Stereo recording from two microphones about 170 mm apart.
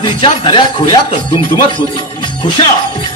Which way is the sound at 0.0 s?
30° left (ahead or behind).